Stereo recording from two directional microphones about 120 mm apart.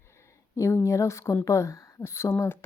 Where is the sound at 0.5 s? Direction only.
25° left (ahead or behind).